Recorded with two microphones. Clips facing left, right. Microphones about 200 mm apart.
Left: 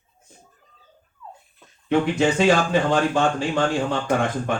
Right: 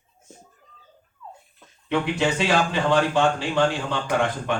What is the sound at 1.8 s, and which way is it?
A man's voice, 45° left (ahead or behind).